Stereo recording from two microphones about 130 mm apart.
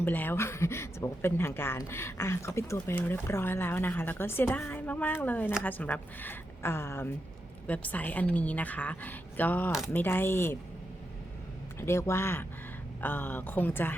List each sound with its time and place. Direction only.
0.0 s speech: 15° left (ahead or behind)
11.8 s speech: 20° left (ahead or behind)